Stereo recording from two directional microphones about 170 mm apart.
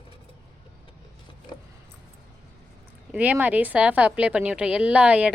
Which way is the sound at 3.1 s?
10° right (ahead or behind).